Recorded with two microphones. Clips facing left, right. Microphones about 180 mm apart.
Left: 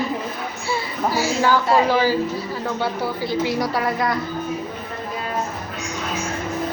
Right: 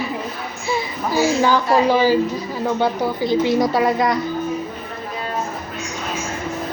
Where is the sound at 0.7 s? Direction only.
15° right (ahead or behind).